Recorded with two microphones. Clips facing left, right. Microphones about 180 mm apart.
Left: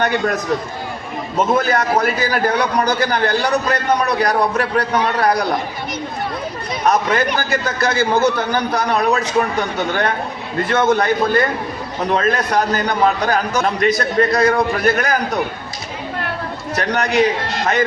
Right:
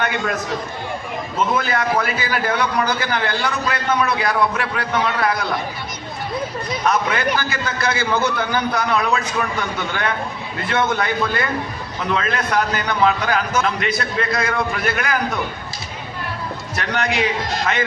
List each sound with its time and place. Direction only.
0.0 s a man's voice: 40° left (ahead or behind)
1.5 s a man's voice: 45° left (ahead or behind)
6.8 s a man's voice: 40° left (ahead or behind)
16.7 s a man's voice: 35° left (ahead or behind)